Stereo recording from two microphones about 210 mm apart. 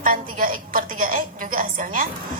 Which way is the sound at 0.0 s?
40° right (ahead or behind).